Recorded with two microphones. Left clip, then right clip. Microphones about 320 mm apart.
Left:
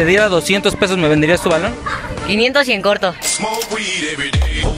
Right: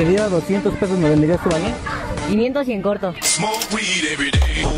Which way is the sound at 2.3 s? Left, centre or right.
Left.